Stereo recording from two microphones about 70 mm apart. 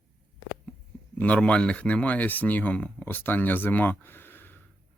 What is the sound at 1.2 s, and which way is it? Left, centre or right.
Speech, centre.